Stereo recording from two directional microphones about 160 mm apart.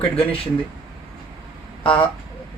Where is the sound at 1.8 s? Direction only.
35° left (ahead or behind).